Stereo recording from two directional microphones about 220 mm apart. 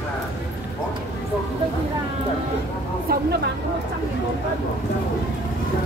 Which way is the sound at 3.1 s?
45° right (ahead or behind).